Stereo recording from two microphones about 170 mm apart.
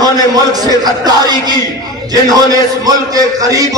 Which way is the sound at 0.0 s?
20° right (ahead or behind).